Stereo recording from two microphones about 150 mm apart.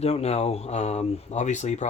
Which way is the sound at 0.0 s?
45° left (ahead or behind).